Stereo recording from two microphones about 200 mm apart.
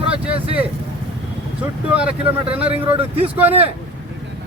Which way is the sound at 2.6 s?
30° right (ahead or behind).